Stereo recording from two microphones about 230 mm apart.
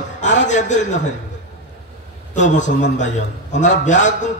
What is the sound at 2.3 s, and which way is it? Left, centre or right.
A man's voice, left.